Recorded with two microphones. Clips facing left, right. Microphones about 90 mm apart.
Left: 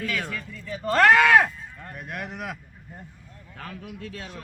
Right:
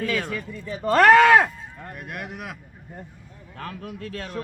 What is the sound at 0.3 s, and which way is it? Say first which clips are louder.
Speech: right 3 dB; 15° right (ahead or behind).